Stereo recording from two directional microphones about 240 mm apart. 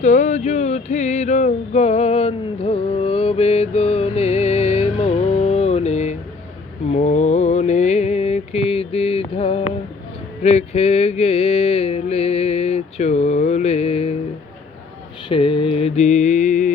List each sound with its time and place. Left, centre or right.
0.0 s a sound: left
6.9 s mantra: left
15.3 s mantra: left